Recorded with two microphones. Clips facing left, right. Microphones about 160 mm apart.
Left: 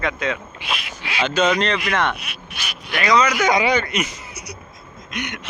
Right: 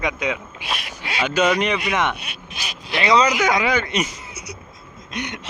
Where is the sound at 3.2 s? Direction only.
15° right (ahead or behind).